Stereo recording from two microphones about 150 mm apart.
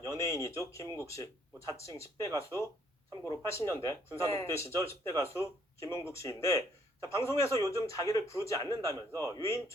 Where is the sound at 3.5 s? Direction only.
20° left (ahead or behind).